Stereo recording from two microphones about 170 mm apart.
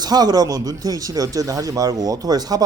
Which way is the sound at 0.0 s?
25° right (ahead or behind).